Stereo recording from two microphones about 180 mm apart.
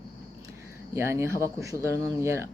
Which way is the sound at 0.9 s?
15° right (ahead or behind).